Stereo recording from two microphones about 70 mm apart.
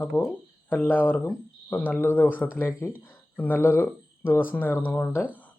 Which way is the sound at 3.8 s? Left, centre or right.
Left.